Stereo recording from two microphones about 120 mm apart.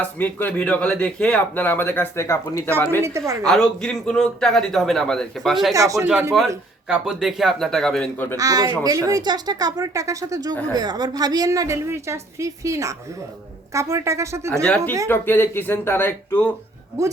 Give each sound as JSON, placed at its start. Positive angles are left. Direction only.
{"t": 0.0, "sound": "a woman's voice", "side_deg": 15}
{"t": 3.0, "sound": "a woman's voice", "side_deg": -25}
{"t": 3.4, "sound": "a man's voice", "side_deg": 5}
{"t": 5.7, "sound": "a woman's voice", "side_deg": -25}
{"t": 6.3, "sound": "a man's voice", "side_deg": 0}
{"t": 8.4, "sound": "a woman's voice", "side_deg": -30}
{"t": 15.0, "sound": "speech", "side_deg": 20}